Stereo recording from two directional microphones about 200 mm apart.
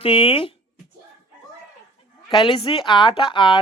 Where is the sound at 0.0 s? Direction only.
30° left (ahead or behind).